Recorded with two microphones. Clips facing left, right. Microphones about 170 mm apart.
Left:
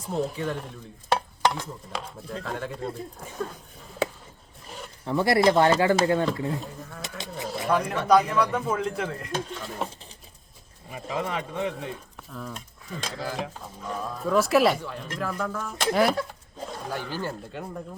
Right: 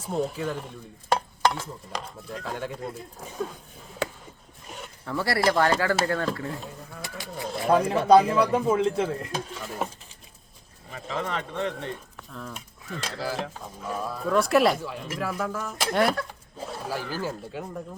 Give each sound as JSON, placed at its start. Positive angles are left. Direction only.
{"t": 0.0, "sound": "speech", "side_deg": 0}
{"t": 4.6, "sound": "a sound", "side_deg": -5}
{"t": 5.0, "sound": "speech", "side_deg": 20}
{"t": 7.7, "sound": "speech", "side_deg": -30}
{"t": 9.3, "sound": "speech", "side_deg": -5}
{"t": 10.8, "sound": "speech", "side_deg": 10}